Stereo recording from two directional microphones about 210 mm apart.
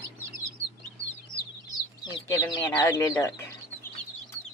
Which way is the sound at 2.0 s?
20° left (ahead or behind).